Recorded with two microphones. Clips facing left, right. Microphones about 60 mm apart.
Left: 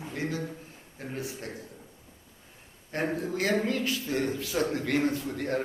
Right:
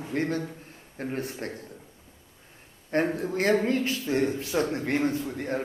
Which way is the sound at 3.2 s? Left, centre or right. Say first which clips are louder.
Right 4 dB; right.